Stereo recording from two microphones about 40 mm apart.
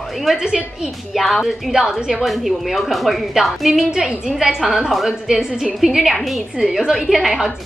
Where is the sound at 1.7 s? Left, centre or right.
Centre.